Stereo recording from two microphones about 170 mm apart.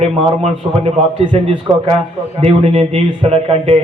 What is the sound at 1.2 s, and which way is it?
Speech, 35° right (ahead or behind).